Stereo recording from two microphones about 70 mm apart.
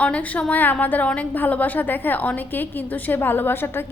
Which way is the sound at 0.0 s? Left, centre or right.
Centre.